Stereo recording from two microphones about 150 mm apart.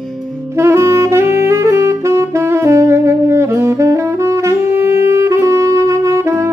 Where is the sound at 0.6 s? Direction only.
20° right (ahead or behind).